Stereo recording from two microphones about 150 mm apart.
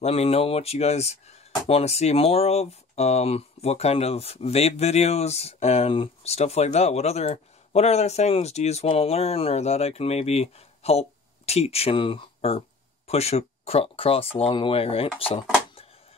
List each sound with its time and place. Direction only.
0.0 s speech: 45° left (ahead or behind)